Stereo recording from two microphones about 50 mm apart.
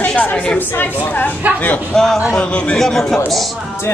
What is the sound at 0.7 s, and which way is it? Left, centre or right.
Speech, left.